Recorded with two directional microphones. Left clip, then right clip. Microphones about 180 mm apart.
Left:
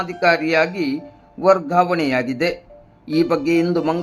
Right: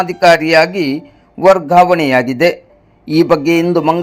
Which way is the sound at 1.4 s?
30° right (ahead or behind).